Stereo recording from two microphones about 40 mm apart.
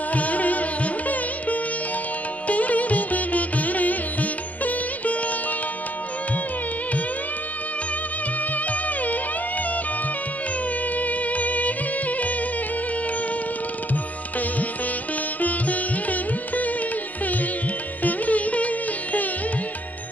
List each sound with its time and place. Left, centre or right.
0.1 s music: left
11.0 s music: left
15.4 s sitar: left
18.0 s music: left